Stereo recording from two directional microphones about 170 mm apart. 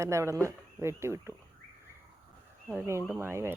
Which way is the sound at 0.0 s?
15° right (ahead or behind).